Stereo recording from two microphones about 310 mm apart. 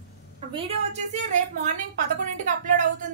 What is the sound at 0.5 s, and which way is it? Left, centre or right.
Speech, right.